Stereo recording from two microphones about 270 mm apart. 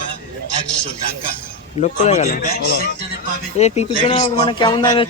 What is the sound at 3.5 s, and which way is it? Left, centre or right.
Speech, left.